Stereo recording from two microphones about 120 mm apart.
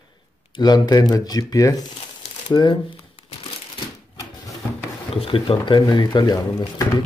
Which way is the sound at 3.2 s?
50° left (ahead or behind).